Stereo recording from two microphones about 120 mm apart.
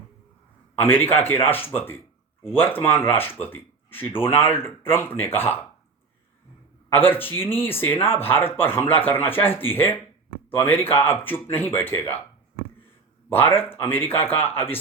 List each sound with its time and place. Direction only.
0.8 s speech: 20° left (ahead or behind)
6.9 s speech: 20° left (ahead or behind)
13.3 s speech: 20° left (ahead or behind)